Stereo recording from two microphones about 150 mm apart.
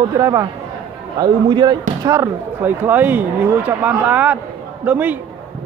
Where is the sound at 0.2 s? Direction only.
20° right (ahead or behind).